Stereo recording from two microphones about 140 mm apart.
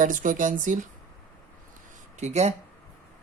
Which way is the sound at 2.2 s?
50° right (ahead or behind).